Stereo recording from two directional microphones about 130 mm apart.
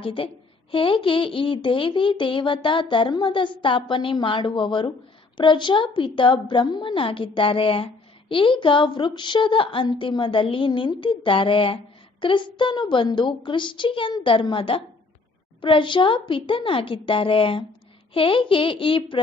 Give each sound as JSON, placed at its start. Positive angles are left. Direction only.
{"t": 0.0, "sound": "a woman's voice", "side_deg": 45}